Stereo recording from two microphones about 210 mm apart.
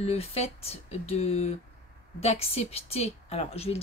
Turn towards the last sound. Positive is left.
turn(degrees=30)  # may be behind; listen again after turning